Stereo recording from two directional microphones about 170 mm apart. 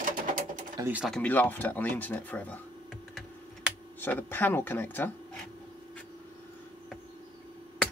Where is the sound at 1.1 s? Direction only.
10° left (ahead or behind).